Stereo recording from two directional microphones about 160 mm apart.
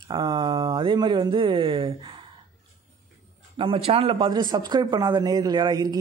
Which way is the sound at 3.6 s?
35° right (ahead or behind).